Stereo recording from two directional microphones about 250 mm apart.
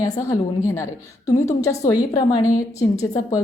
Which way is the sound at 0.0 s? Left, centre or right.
Centre.